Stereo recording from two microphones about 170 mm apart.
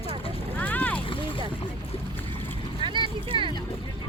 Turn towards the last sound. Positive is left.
turn(degrees=-30)  # may be behind; listen again after turning